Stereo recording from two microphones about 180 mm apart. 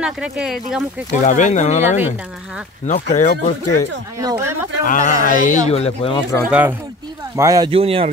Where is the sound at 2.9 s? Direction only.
45° left (ahead or behind).